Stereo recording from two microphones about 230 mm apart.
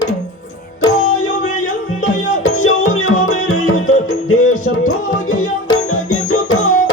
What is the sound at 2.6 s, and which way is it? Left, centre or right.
Music, left.